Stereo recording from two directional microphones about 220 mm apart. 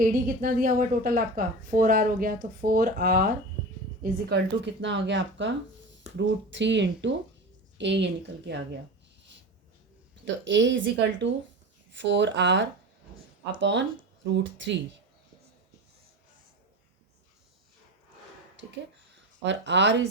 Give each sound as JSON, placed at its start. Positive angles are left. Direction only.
{"t": 0.0, "sound": "a woman's voice", "side_deg": -40}
{"t": 4.0, "sound": "speech", "side_deg": -50}
{"t": 10.2, "sound": "speech", "side_deg": -55}
{"t": 19.4, "sound": "speech", "side_deg": -55}